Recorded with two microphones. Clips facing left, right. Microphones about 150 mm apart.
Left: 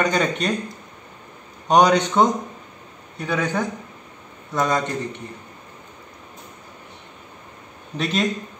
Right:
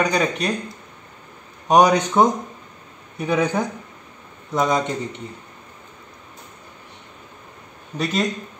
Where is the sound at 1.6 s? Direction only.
5° right (ahead or behind).